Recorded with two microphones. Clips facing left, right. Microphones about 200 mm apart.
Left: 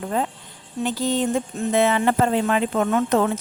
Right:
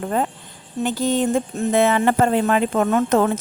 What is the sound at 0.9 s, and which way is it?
Speech, 50° right (ahead or behind).